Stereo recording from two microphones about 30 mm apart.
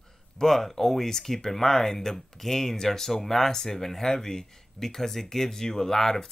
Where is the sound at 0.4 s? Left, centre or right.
Centre.